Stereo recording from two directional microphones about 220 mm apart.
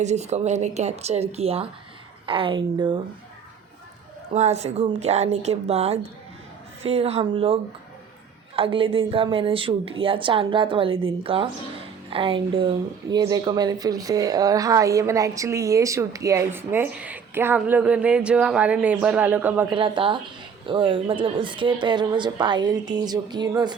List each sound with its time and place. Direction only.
0.0 s a woman's voice: 30° right (ahead or behind)
4.4 s a woman's voice: 30° right (ahead or behind); by 19.6 s 5° right (ahead or behind)
19.7 s a woman's voice: 20° right (ahead or behind)